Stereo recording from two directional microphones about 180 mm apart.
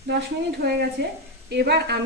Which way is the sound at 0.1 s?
60° right (ahead or behind).